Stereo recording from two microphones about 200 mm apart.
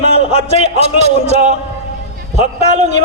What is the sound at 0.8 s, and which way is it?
Speech, 35° right (ahead or behind).